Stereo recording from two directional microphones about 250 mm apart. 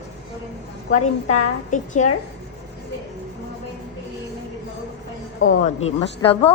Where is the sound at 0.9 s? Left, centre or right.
Left.